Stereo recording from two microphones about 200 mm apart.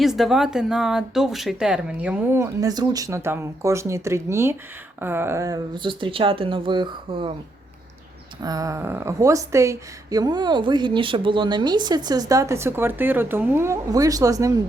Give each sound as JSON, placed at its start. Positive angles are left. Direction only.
{"t": 0.0, "sound": "speech", "side_deg": 0}
{"t": 8.4, "sound": "speech", "side_deg": -20}